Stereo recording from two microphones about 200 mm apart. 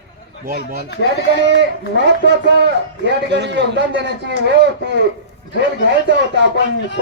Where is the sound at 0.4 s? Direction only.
45° right (ahead or behind).